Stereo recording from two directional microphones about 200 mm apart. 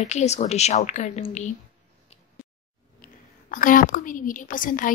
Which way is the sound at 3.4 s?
40° left (ahead or behind).